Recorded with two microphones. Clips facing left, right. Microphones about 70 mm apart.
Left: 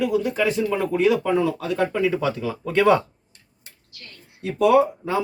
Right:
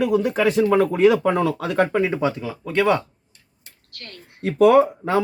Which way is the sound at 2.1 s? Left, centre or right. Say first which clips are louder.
Right 1 dB; right.